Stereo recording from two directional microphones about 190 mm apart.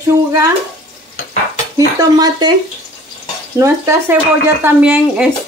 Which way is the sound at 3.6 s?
15° right (ahead or behind).